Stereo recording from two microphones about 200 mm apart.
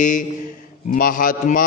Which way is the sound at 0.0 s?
40° left (ahead or behind).